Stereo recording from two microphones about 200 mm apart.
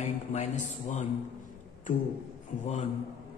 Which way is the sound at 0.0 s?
35° left (ahead or behind).